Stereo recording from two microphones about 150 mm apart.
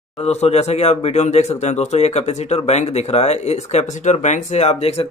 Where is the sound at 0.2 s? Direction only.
45° left (ahead or behind).